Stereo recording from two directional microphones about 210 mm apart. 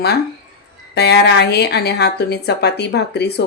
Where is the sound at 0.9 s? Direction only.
50° left (ahead or behind).